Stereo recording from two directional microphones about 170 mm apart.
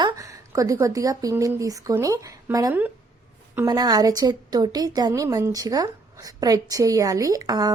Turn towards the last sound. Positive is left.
turn(degrees=-20)  # may be behind; listen again after turning